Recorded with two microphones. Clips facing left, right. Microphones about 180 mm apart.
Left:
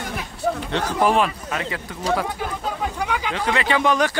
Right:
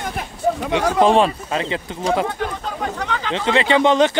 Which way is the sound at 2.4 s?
10° left (ahead or behind).